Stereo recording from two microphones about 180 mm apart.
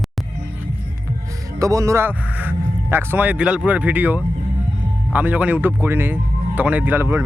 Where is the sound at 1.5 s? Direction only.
15° right (ahead or behind).